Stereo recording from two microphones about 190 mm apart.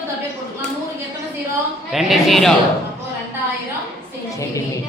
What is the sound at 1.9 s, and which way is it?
Speech, centre (ahead or behind).